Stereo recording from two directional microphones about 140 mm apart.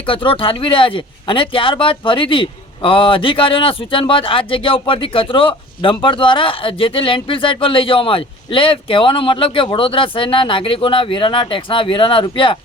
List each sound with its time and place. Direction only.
0.0 s speech: 40° left (ahead or behind)